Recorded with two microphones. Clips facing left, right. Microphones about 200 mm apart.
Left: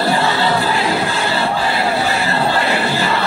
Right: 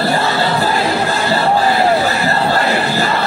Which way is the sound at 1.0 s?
40° right (ahead or behind).